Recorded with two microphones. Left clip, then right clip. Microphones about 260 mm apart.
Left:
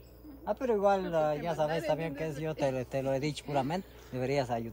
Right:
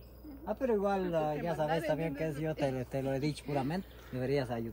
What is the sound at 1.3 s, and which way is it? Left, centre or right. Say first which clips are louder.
Speech: left 2 dB; centre.